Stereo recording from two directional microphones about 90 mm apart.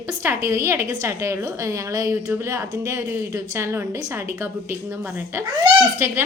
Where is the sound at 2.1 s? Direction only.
25° right (ahead or behind).